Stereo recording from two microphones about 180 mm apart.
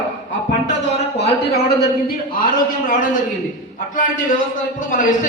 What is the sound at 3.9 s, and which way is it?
A man's voice, 45° left (ahead or behind).